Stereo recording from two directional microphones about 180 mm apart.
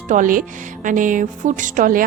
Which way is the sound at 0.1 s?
50° right (ahead or behind).